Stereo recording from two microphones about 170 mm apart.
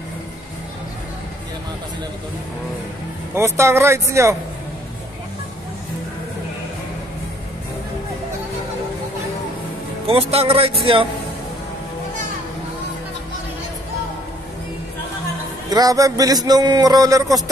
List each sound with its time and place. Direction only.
3.3 s speech: 15° right (ahead or behind)
10.0 s a man's voice: 35° right (ahead or behind)
15.7 s a man's voice: 20° right (ahead or behind)